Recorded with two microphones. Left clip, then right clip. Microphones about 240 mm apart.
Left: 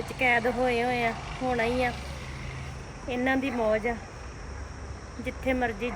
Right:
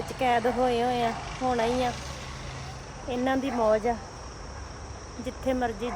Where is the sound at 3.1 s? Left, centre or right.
Centre.